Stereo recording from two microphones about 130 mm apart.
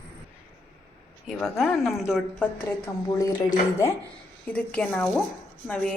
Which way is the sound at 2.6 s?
15° left (ahead or behind).